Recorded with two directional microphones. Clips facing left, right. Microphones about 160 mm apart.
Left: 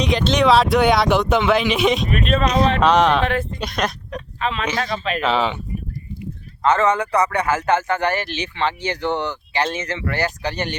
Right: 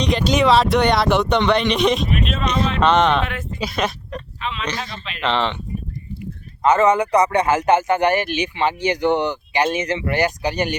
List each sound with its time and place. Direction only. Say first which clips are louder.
0.0 s speech: even; centre (ahead or behind)
2.0 s speech: left 3 dB; 45° left (ahead or behind)
2.8 s speech: right 2 dB; centre (ahead or behind)
4.4 s speech: left 5 dB; 45° left (ahead or behind)
5.2 s speech: right 1 dB; 5° left (ahead or behind)
6.6 s speech: right 2 dB; 15° right (ahead or behind)